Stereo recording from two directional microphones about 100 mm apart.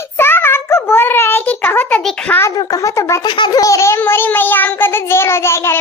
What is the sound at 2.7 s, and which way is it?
Speech, 35° left (ahead or behind).